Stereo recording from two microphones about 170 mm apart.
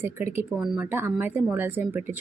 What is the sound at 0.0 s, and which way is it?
A woman's voice, 15° right (ahead or behind).